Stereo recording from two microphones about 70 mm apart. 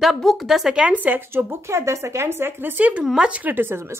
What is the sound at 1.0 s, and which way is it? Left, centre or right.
A woman's voice, right.